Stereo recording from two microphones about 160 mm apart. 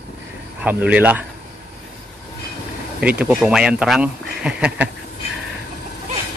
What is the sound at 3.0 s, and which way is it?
Speech, 10° right (ahead or behind).